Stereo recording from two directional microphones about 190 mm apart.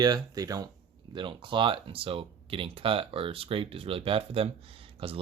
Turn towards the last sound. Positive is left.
turn(degrees=-30)  # may be behind; listen again after turning